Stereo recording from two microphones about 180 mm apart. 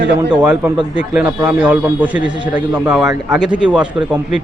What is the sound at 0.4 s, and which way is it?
A man's voice, 10° right (ahead or behind).